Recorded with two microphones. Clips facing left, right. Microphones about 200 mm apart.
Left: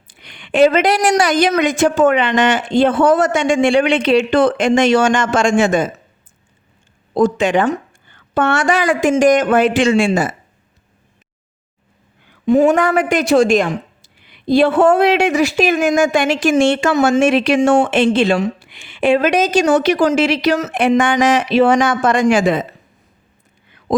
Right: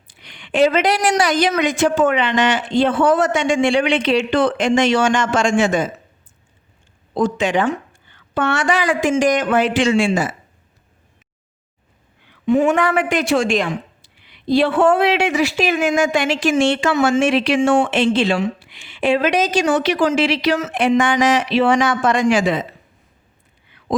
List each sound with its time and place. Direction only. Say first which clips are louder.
0.1 s a woman's voice: left 3 dB; 55° left (ahead or behind)
7.1 s a woman's voice: left 4 dB; 45° left (ahead or behind)
12.2 s a woman's voice: left 4 dB; 40° left (ahead or behind)
23.6 s a sound: left 4 dB; 45° left (ahead or behind)